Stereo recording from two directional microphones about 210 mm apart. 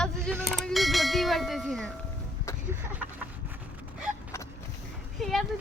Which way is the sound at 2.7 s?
10° right (ahead or behind).